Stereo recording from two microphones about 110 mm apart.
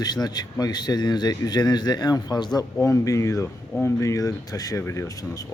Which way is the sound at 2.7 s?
30° left (ahead or behind).